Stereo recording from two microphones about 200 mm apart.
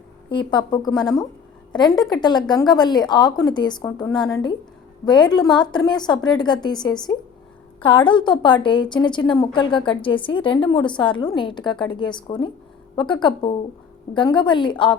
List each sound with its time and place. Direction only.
0.3 s a woman's voice: 20° left (ahead or behind)